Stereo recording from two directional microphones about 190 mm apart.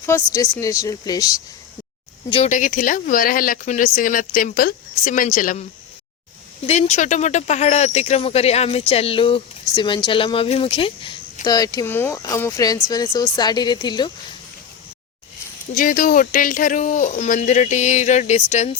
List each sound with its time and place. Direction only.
0.0 s a woman's voice: 15° left (ahead or behind)
2.3 s speech: 40° left (ahead or behind)
6.7 s speech: 35° left (ahead or behind)
15.7 s speech: 45° left (ahead or behind)